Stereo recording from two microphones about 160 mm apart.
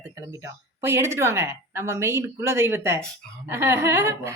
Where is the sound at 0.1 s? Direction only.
20° right (ahead or behind).